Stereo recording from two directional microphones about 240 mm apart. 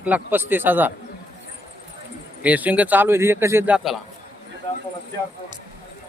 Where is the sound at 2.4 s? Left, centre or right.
Centre.